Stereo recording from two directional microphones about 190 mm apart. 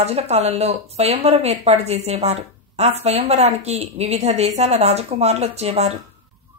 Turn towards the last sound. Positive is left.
turn(degrees=-35)  # may be behind; listen again after turning